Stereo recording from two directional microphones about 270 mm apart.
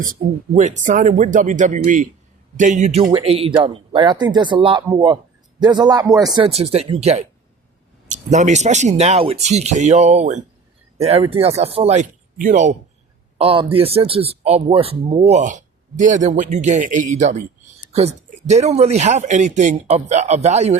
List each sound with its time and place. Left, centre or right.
0.0 s speech: right